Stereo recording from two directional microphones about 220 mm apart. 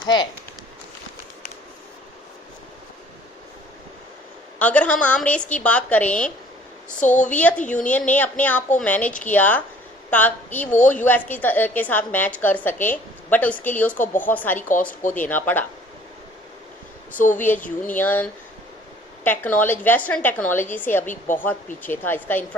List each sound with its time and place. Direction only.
0.0 s speech: 20° left (ahead or behind)
4.6 s a woman's voice: 5° left (ahead or behind)
7.0 s a woman's voice: 35° left (ahead or behind)
7.3 s a woman's voice: 5° left (ahead or behind)
13.9 s a woman's voice: 35° left (ahead or behind)
14.2 s a woman's voice: 10° left (ahead or behind)
17.3 s a woman's voice: 10° left (ahead or behind)
21.3 s a woman's voice: 35° left (ahead or behind)
21.8 s a woman's voice: 10° left (ahead or behind)